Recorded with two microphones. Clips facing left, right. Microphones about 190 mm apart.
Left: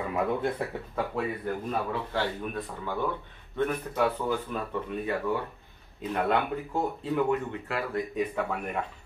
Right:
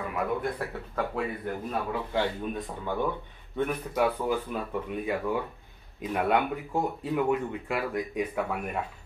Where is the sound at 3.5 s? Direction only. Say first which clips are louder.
Even; 10° right (ahead or behind).